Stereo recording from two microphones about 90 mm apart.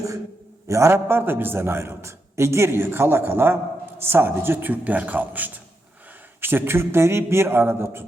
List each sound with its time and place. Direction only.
0.7 s a man's voice: 30° right (ahead or behind)